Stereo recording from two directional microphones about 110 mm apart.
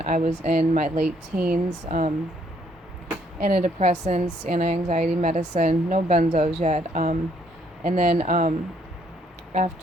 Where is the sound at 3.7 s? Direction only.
90° right.